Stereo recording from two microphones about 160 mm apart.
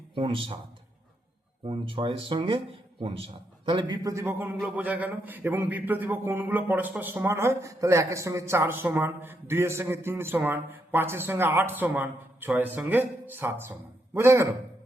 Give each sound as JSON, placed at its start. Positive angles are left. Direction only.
{"t": 0.2, "sound": "speech", "side_deg": -35}
{"t": 1.6, "sound": "a man's voice", "side_deg": -35}